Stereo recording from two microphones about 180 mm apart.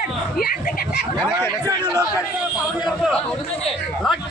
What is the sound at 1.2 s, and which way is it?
Chatter, 25° right (ahead or behind).